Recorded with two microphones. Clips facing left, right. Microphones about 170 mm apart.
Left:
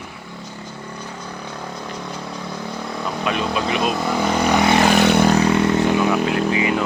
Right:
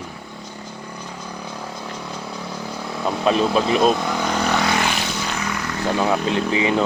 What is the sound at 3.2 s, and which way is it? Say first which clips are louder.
Speech: right 5 dB; 30° right (ahead or behind).